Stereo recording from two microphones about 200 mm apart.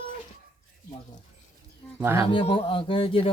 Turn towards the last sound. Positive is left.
turn(degrees=25)  # may be behind; listen again after turning